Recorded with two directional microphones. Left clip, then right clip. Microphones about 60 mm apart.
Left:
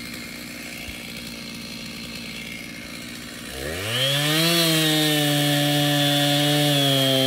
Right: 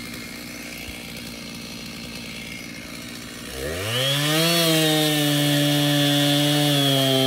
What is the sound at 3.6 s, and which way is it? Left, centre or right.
Chainsaw, right.